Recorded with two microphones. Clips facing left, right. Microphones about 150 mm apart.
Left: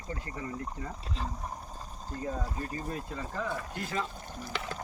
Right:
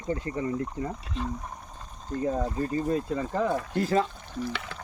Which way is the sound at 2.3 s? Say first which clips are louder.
Right 8 dB; 35° right (ahead or behind).